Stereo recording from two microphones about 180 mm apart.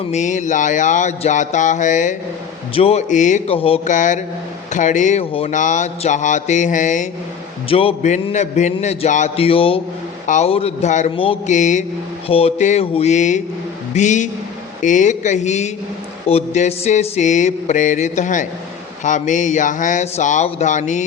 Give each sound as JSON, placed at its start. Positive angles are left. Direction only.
{"t": 0.1, "sound": "a man's voice", "side_deg": 40}
{"t": 7.7, "sound": "a man's voice", "side_deg": 30}